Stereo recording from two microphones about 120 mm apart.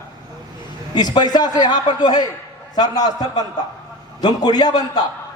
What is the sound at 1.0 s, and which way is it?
A man's voice, 35° left (ahead or behind).